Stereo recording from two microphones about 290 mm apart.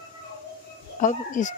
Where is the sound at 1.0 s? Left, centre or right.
Left.